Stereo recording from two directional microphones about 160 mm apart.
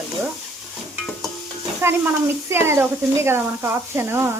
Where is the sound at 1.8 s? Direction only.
15° right (ahead or behind).